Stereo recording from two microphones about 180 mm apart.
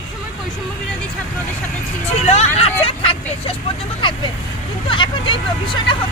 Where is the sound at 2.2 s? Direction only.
35° left (ahead or behind).